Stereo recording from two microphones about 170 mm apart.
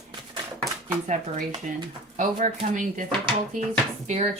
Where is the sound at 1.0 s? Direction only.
45° right (ahead or behind).